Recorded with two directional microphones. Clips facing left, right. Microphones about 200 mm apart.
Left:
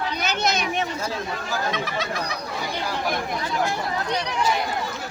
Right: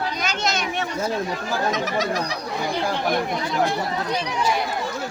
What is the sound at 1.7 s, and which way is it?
Speech, 40° right (ahead or behind).